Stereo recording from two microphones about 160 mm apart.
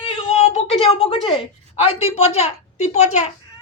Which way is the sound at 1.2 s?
40° left (ahead or behind).